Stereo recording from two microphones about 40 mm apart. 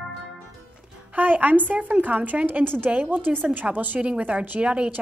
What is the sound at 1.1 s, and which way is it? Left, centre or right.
A woman's voice, right.